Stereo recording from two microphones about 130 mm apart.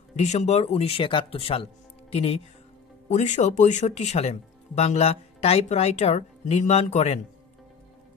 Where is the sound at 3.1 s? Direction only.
65° left (ahead or behind).